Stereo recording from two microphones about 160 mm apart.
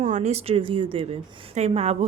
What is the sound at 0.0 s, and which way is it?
A woman's voice, 45° right (ahead or behind).